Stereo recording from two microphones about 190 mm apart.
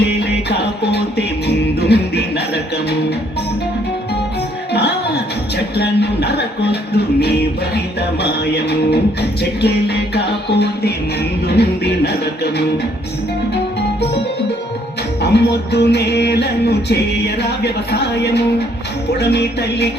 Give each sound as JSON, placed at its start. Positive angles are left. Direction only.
{"t": 0.2, "sound": "music", "side_deg": 65}
{"t": 4.7, "sound": "music", "side_deg": 60}
{"t": 15.2, "sound": "music", "side_deg": 60}